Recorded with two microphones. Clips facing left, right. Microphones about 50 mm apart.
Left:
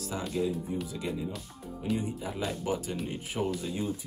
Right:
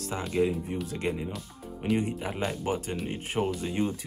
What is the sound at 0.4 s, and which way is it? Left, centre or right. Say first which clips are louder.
Speech: right 5 dB; right.